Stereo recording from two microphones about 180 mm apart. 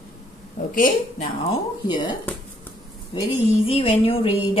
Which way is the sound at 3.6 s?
30° left (ahead or behind).